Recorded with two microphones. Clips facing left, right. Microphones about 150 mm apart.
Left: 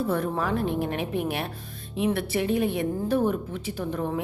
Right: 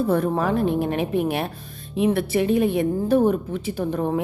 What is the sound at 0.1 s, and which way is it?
Speech, 40° right (ahead or behind).